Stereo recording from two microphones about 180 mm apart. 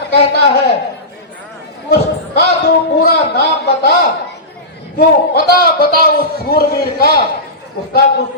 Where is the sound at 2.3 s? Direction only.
60° left (ahead or behind).